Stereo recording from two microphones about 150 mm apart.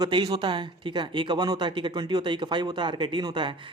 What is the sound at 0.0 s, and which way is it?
A man's voice, 30° right (ahead or behind).